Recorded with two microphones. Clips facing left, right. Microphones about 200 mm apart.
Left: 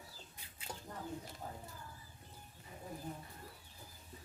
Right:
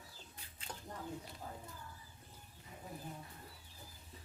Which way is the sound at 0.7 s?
10° left (ahead or behind).